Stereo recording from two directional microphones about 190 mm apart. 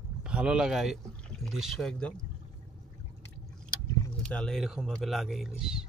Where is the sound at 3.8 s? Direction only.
15° left (ahead or behind).